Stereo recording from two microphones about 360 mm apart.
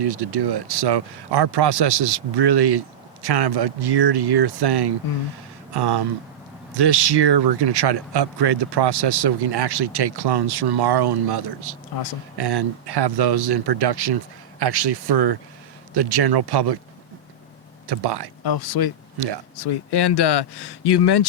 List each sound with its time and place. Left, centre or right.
0.0 s speech: right
17.8 s speech: right
18.4 s speech: left